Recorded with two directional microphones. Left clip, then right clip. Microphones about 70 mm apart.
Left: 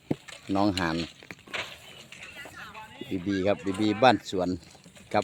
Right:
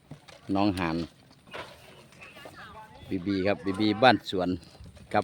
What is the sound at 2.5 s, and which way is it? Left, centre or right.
Run, centre.